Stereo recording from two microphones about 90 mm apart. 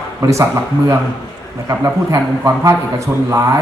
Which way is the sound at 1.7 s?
40° right (ahead or behind).